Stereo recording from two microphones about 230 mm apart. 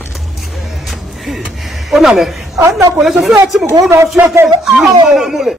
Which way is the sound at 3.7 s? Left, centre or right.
Centre.